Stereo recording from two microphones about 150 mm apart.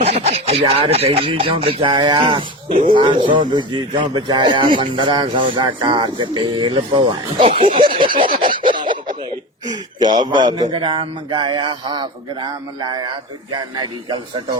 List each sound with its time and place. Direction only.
0.0 s a man's voice: 45° right (ahead or behind)
9.6 s a man's voice: 30° right (ahead or behind)